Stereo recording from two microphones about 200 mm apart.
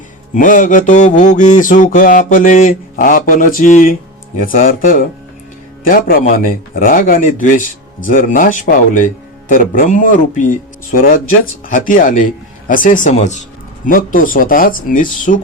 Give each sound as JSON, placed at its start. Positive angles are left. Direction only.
{"t": 0.3, "sound": "mantra", "side_deg": 45}
{"t": 4.4, "sound": "speech", "side_deg": 45}
{"t": 11.7, "sound": "mantra", "side_deg": 40}
{"t": 13.8, "sound": "speech", "side_deg": 45}